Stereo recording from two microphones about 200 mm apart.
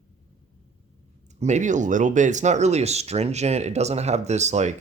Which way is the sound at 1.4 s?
35° right (ahead or behind).